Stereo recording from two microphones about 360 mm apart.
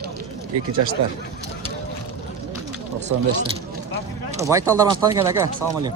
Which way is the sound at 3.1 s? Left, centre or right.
Right.